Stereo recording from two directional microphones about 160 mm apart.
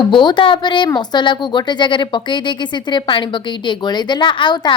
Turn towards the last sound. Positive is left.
turn(degrees=30)  # may be behind; listen again after turning